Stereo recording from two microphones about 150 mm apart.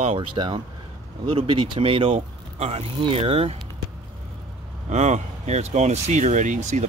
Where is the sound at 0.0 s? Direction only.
45° right (ahead or behind).